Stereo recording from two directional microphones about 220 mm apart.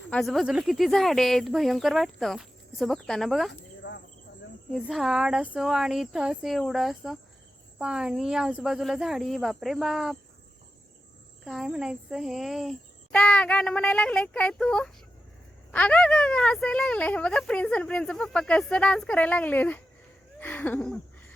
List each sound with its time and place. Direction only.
0.1 s speech: centre (ahead or behind)
3.8 s cricket: 50° left (ahead or behind)
4.7 s speech: centre (ahead or behind)
11.4 s speech: centre (ahead or behind)
20.4 s a sound: 5° left (ahead or behind)